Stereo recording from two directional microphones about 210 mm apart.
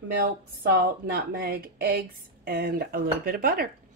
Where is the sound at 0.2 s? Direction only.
50° right (ahead or behind).